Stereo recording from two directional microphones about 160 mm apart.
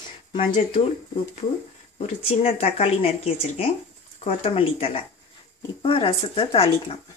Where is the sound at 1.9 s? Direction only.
40° left (ahead or behind).